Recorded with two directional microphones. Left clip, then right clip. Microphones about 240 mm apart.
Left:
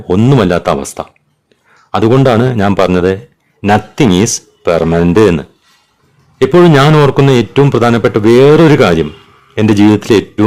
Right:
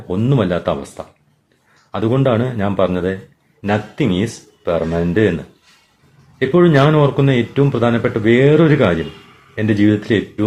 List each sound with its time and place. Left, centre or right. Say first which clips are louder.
0.1 s a man's voice: left 8 dB; left
6.6 s a man's voice: left 5 dB; left